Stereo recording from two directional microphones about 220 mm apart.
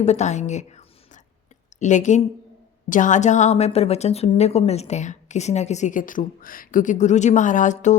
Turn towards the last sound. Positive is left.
turn(degrees=35)  # may be behind; listen again after turning